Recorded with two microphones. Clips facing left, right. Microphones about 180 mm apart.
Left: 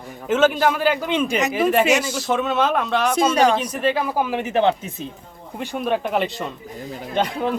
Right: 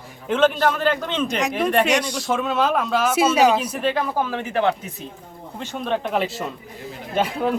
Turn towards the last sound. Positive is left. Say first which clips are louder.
# even
turn(degrees=-5)  # may be behind; listen again after turning